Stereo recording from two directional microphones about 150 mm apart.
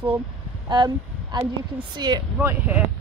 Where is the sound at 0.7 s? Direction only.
30° right (ahead or behind).